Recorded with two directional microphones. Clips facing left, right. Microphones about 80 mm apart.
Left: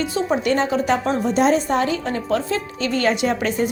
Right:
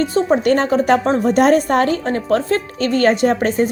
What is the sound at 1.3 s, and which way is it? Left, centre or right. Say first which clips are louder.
A woman's voice: right 4 dB; right.